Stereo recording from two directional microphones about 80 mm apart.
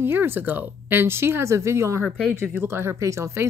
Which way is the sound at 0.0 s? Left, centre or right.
Right.